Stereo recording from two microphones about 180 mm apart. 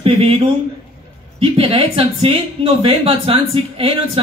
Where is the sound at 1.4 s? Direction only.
30° right (ahead or behind).